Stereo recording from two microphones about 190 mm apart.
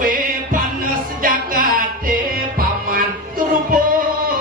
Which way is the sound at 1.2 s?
50° right (ahead or behind).